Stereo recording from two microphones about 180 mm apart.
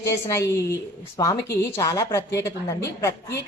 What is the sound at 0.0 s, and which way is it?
A woman's voice, 15° left (ahead or behind).